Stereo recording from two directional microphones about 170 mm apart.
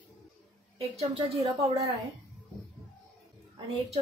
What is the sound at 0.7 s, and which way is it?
Speech, 35° right (ahead or behind).